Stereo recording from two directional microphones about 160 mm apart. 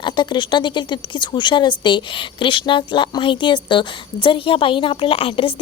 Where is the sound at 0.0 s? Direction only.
30° left (ahead or behind).